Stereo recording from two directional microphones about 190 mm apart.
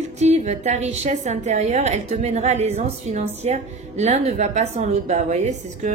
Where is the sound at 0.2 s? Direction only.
40° right (ahead or behind).